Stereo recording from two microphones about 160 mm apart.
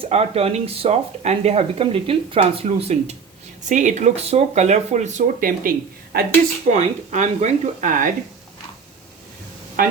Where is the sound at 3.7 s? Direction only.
50° right (ahead or behind); by 6.3 s 70° right (ahead or behind).